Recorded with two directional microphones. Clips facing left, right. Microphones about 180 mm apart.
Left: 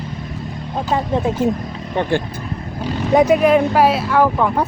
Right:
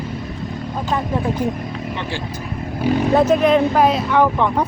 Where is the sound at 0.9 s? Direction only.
25° left (ahead or behind).